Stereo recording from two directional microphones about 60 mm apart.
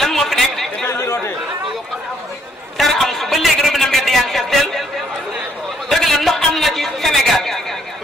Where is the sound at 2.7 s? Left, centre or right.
Centre.